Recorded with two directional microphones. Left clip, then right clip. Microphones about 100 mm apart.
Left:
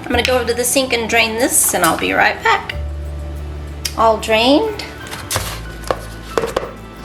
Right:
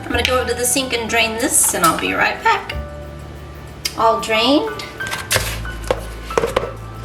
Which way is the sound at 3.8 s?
20° left (ahead or behind).